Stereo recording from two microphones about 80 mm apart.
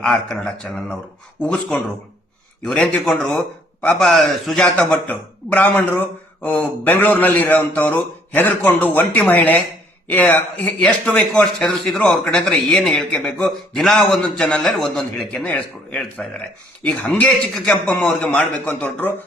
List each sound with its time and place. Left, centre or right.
0.0 s a man's voice: centre
11.6 s a man's voice: centre
15.4 s a man's voice: centre